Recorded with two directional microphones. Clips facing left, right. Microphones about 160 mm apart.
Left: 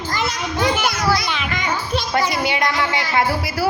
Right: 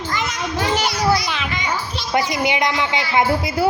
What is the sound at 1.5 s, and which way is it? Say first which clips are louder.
Children playing: left 2 dB; 50° left (ahead or behind).